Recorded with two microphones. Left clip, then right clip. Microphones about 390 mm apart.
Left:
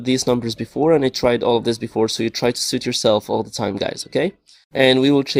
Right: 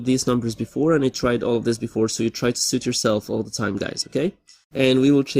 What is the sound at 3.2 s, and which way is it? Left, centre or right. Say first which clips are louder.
Speech: left 5 dB; left.